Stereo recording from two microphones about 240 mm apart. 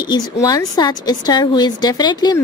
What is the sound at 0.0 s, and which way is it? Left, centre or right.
A woman's voice, centre.